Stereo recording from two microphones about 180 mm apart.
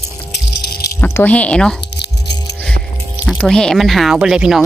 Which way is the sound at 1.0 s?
10° left (ahead or behind).